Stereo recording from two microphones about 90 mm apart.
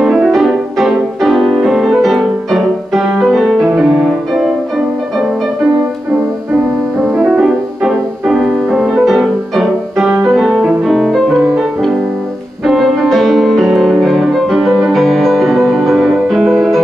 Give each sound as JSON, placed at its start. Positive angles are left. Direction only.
{"t": 0.0, "sound": "music", "side_deg": 0}
{"t": 7.0, "sound": "music", "side_deg": 5}